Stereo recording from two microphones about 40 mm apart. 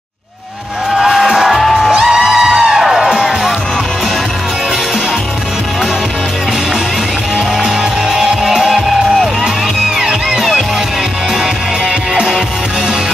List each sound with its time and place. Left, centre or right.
1.0 s music: centre
1.9 s music: centre
7.3 s music: centre